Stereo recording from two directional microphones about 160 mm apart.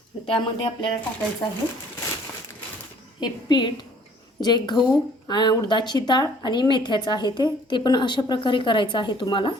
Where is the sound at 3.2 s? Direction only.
25° left (ahead or behind).